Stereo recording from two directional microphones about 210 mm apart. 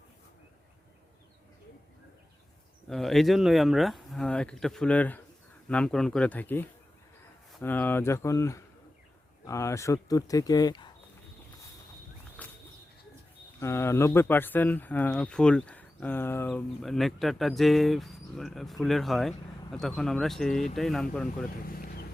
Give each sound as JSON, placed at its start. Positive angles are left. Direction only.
{"t": 2.9, "sound": "speech", "side_deg": 0}
{"t": 12.4, "sound": "a sound", "side_deg": 5}
{"t": 13.6, "sound": "speech", "side_deg": 15}
{"t": 21.7, "sound": "vehicle", "side_deg": 45}